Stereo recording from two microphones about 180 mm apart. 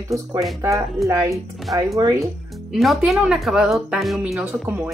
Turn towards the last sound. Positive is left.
turn(degrees=-10)  # may be behind; listen again after turning